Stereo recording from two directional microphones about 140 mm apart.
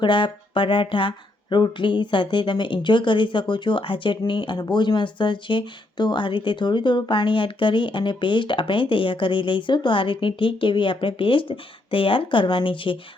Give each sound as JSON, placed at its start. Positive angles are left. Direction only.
{"t": 0.0, "sound": "speech", "side_deg": 35}